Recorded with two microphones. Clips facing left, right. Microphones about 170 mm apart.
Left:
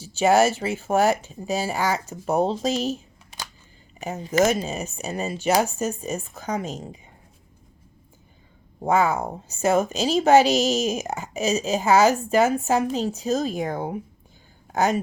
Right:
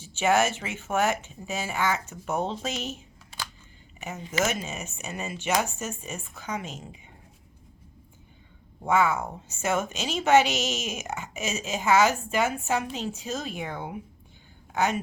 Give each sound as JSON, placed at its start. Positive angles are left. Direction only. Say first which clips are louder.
{"t": 0.0, "sound": "a woman's voice", "louder": "left 5 dB", "side_deg": 35}
{"t": 3.3, "sound": "camera", "louder": "left 1 dB", "side_deg": 15}
{"t": 4.0, "sound": "a woman's voice", "louder": "left 8 dB", "side_deg": 35}
{"t": 8.8, "sound": "a woman's voice", "louder": "left 3 dB", "side_deg": 35}